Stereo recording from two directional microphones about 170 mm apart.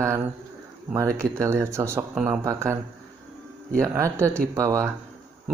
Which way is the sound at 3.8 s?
15° right (ahead or behind).